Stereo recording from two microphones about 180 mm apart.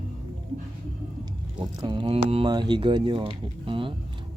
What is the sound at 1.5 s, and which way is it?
Speech, 25° right (ahead or behind).